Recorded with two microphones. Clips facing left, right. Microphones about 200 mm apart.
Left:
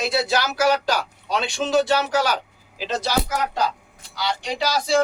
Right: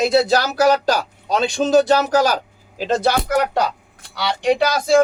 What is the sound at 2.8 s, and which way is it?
Speech, 55° right (ahead or behind).